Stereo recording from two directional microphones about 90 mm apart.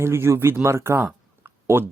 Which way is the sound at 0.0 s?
30° right (ahead or behind).